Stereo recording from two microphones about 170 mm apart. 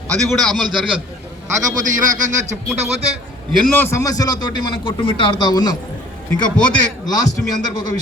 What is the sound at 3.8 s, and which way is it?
A man's voice, 15° left (ahead or behind).